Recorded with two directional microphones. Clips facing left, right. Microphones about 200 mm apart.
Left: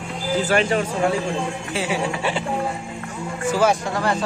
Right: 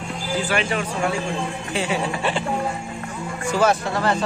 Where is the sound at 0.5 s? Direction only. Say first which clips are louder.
Left 5 dB; 40° left (ahead or behind).